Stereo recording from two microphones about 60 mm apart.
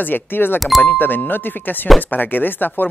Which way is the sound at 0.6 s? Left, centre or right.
Centre.